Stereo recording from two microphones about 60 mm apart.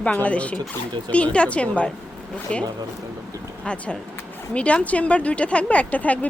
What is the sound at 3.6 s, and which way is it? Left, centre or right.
Speech, centre.